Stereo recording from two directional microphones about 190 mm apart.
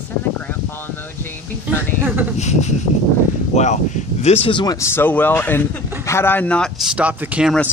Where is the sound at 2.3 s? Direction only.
35° left (ahead or behind); by 7.6 s 5° right (ahead or behind).